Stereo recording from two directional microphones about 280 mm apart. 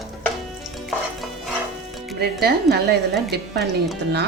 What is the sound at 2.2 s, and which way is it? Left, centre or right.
A woman's voice, right.